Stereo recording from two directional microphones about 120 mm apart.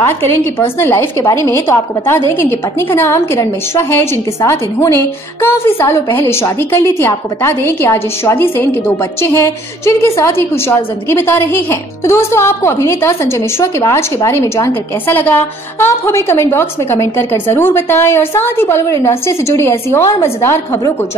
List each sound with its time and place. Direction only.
0.0 s a woman's voice: 20° left (ahead or behind)